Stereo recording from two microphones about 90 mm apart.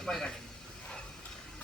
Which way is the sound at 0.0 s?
5° left (ahead or behind).